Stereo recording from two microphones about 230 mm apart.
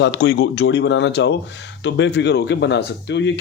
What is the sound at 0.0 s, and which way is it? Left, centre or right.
Speech, left.